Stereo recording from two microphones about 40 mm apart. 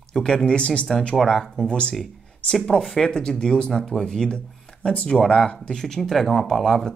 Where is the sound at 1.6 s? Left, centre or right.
Left.